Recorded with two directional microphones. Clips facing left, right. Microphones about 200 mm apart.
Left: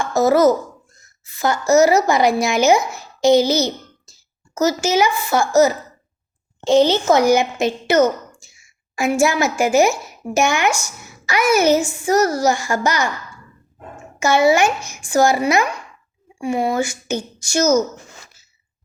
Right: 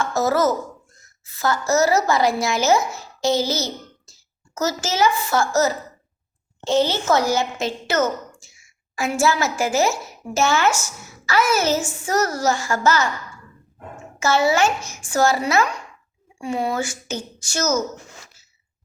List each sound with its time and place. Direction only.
0.0 s a woman's voice: 15° left (ahead or behind)
14.2 s a woman's voice: 15° left (ahead or behind)
16.4 s a woman's voice: 10° left (ahead or behind)